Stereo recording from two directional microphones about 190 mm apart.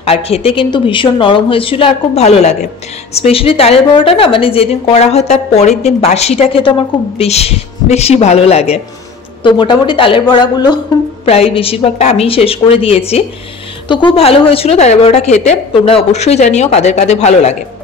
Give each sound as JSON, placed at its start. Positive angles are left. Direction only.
{"t": 0.0, "sound": "a woman's voice", "side_deg": 30}